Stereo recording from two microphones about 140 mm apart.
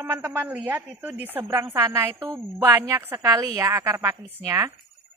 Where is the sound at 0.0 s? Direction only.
15° right (ahead or behind).